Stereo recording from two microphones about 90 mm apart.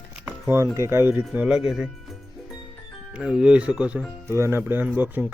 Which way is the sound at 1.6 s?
5° right (ahead or behind).